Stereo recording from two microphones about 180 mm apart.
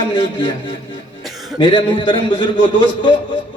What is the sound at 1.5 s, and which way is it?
A man's voice, 30° left (ahead or behind).